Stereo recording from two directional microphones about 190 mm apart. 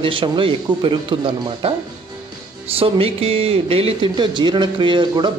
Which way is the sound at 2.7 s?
30° right (ahead or behind).